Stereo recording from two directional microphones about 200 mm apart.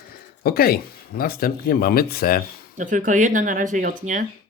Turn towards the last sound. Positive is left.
turn(degrees=-40)  # may be behind; listen again after turning